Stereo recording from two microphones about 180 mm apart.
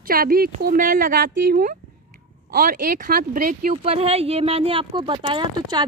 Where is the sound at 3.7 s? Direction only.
35° right (ahead or behind).